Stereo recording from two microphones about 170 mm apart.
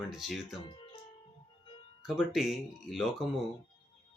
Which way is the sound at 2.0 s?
Centre (ahead or behind).